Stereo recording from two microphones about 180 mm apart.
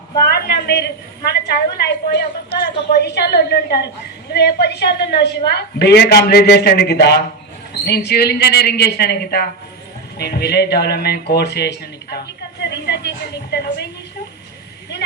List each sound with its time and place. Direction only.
0.3 s a woman's voice: 60° left (ahead or behind)